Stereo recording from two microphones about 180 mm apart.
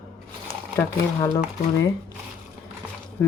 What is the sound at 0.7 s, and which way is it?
Speech, 15° left (ahead or behind).